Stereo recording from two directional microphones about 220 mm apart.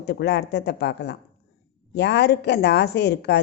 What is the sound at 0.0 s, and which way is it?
A woman's voice, 50° left (ahead or behind).